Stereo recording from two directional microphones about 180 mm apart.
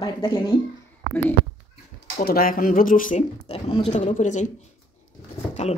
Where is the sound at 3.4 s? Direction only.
30° left (ahead or behind).